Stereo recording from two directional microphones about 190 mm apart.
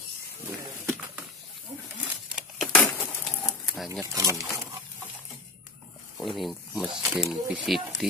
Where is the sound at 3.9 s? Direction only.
15° right (ahead or behind).